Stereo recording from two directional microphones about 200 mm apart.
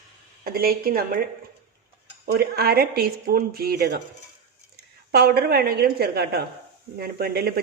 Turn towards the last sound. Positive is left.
turn(degrees=-50)  # may be behind; listen again after turning